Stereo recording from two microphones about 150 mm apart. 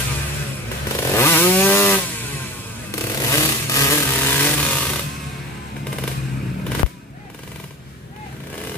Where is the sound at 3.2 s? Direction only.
20° left (ahead or behind).